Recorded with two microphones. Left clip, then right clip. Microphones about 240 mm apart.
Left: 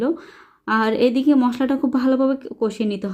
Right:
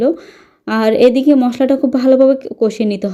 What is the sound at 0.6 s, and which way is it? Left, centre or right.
A woman's voice, centre.